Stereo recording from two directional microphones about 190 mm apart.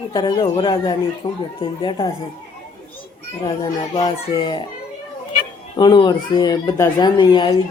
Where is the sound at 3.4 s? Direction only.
20° left (ahead or behind).